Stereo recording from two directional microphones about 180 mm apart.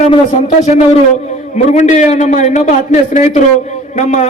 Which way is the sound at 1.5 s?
40° left (ahead or behind).